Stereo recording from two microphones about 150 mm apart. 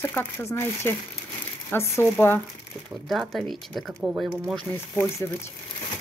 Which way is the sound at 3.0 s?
Centre (ahead or behind).